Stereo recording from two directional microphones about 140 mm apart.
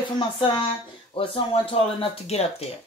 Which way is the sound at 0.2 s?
35° left (ahead or behind).